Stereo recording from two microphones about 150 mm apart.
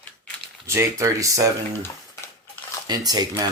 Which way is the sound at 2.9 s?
25° right (ahead or behind).